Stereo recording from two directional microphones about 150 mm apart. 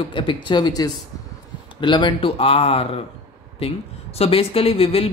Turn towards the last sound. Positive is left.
turn(degrees=40)  # may be behind; listen again after turning